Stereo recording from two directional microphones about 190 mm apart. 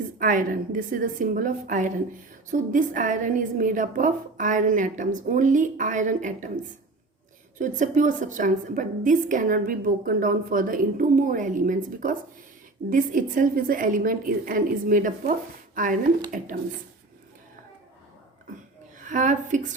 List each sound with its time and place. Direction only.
0.2 s a woman's voice: 45° right (ahead or behind)
7.6 s a woman's voice: 40° right (ahead or behind)
18.9 s speech: 40° right (ahead or behind)